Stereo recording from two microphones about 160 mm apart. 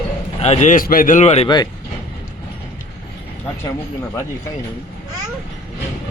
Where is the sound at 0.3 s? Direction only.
45° left (ahead or behind).